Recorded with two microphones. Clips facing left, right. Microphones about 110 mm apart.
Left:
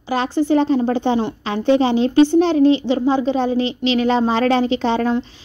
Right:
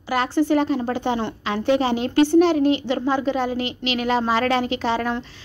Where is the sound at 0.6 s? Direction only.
30° left (ahead or behind).